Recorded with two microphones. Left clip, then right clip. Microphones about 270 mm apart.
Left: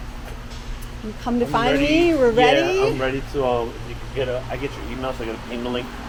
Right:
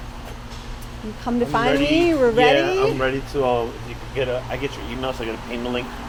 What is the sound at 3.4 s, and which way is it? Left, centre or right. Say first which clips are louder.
Speech: right 1 dB; right.